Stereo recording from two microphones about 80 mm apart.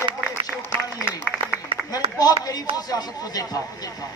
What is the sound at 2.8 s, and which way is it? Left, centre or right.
Speech, left.